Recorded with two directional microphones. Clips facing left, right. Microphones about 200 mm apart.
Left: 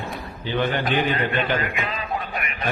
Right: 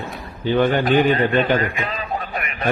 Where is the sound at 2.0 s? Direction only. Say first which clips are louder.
Right 2 dB; 40° right (ahead or behind).